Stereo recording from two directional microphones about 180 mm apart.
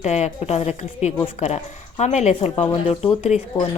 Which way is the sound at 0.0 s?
40° left (ahead or behind).